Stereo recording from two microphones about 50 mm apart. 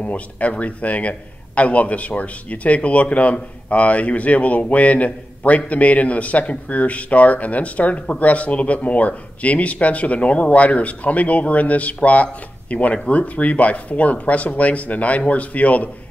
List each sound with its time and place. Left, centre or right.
0.0 s a man's voice: left